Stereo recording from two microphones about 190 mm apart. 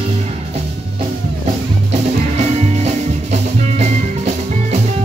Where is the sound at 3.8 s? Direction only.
35° right (ahead or behind).